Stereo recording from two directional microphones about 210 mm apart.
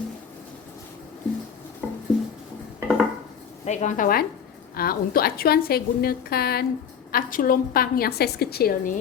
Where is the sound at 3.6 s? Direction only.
35° left (ahead or behind).